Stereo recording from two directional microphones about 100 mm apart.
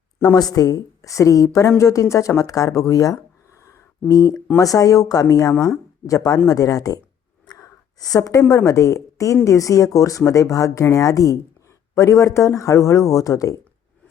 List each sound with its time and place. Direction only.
0.3 s a woman's voice: 40° left (ahead or behind)